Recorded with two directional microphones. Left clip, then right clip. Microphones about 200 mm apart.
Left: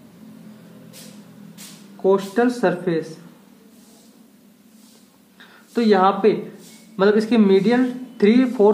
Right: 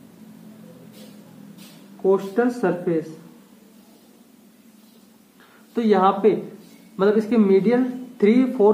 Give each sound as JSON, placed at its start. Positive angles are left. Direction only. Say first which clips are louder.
{"t": 2.0, "sound": "speech", "louder": "left 2 dB", "side_deg": 15}
{"t": 5.8, "sound": "speech", "louder": "left 2 dB", "side_deg": 15}